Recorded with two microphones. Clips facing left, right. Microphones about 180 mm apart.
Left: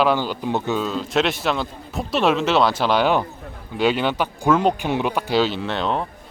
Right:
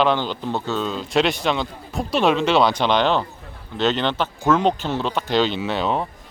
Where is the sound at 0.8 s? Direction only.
Centre (ahead or behind).